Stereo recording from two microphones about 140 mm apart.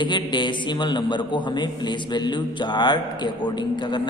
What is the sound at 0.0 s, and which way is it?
A man's voice, 35° left (ahead or behind).